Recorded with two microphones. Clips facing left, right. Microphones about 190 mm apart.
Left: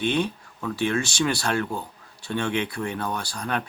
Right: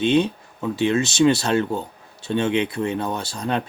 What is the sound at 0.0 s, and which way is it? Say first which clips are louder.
Speech: right 6 dB; 20° right (ahead or behind).